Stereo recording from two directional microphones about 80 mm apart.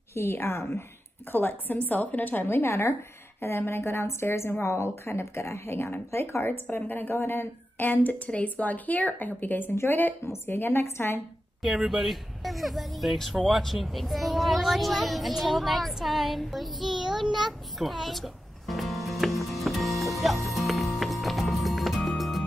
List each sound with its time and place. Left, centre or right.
0.1 s speech: left
1.3 s a woman's voice: left
11.8 s a sound: centre